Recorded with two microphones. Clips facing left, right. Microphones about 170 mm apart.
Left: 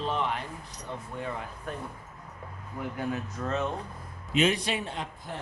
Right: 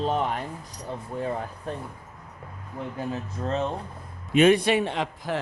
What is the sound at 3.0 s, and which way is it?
Speech, 25° right (ahead or behind).